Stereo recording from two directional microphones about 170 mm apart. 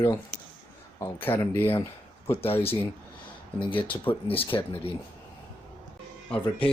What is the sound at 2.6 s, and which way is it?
Speech, 35° left (ahead or behind).